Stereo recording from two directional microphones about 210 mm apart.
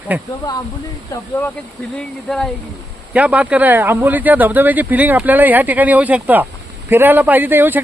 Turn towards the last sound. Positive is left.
turn(degrees=-10)  # may be behind; listen again after turning